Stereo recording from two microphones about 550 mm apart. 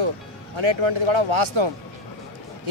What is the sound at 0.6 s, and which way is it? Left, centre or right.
Speech, right.